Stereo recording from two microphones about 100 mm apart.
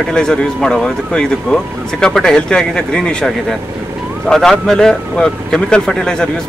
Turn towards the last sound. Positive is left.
turn(degrees=5)  # may be behind; listen again after turning